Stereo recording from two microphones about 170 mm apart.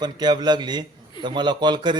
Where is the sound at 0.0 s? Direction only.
25° right (ahead or behind).